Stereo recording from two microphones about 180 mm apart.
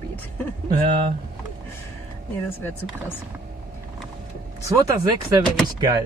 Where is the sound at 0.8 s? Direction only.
25° right (ahead or behind).